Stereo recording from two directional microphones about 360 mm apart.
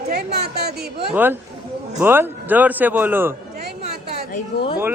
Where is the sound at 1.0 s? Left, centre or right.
Centre.